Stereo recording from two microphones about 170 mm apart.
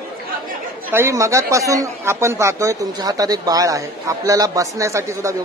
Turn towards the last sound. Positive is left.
turn(degrees=-15)  # may be behind; listen again after turning